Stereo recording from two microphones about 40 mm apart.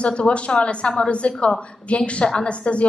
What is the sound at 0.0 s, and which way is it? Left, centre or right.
A woman's voice, left.